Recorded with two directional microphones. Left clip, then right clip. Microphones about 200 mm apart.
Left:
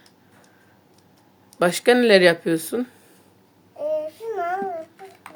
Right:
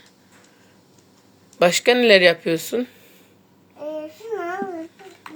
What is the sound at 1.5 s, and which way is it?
Speech, 15° left (ahead or behind).